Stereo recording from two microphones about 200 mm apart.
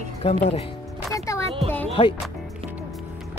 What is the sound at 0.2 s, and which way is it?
Speech, 30° left (ahead or behind).